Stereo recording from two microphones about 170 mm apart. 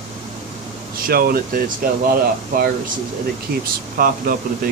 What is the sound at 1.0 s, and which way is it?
Speech, 60° right (ahead or behind).